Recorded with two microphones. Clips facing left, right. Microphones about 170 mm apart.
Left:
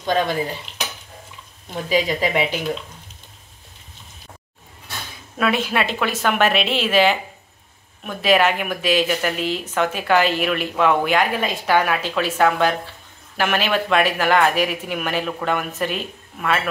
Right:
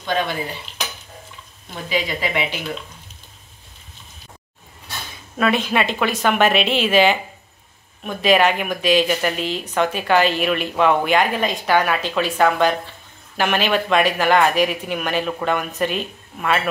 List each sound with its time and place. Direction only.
0.0 s speech: 40° left (ahead or behind)
1.9 s speech: 40° left (ahead or behind)
5.4 s speech: 5° left (ahead or behind)